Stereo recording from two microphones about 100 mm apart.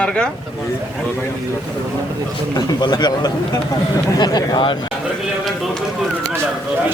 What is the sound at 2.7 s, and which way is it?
Speech, 45° left (ahead or behind).